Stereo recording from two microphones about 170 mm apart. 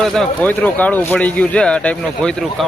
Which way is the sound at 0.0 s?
Centre (ahead or behind).